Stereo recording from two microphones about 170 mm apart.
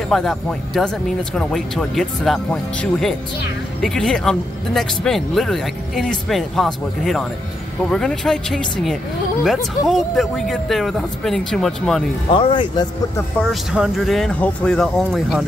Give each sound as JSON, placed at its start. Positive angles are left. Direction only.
{"t": 0.1, "sound": "speech", "side_deg": 0}
{"t": 12.3, "sound": "speech", "side_deg": 30}
{"t": 13.4, "sound": "speech", "side_deg": 0}